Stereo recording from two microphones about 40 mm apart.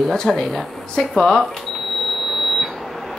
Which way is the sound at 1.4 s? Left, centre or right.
Centre.